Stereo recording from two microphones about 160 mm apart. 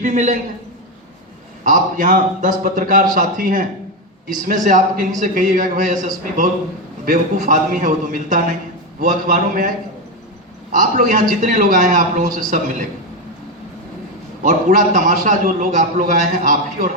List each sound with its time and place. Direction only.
0.0 s a man's voice: 45° right (ahead or behind)
1.6 s a man's voice: 55° right (ahead or behind)
14.4 s a man's voice: 55° right (ahead or behind)